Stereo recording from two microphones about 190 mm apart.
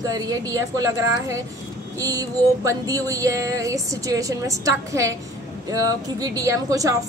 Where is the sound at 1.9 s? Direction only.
20° right (ahead or behind).